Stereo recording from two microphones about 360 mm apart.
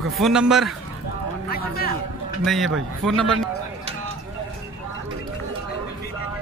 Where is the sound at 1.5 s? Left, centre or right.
Left.